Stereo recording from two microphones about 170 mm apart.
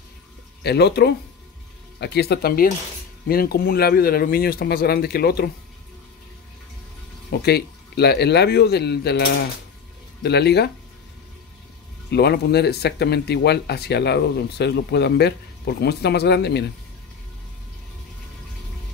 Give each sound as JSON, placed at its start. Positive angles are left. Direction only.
{"t": 0.7, "sound": "speech", "side_deg": 75}
{"t": 7.2, "sound": "speech", "side_deg": 70}
{"t": 12.1, "sound": "speech", "side_deg": 75}